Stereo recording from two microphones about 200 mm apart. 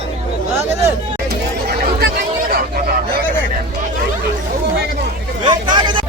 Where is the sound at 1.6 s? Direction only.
50° right (ahead or behind).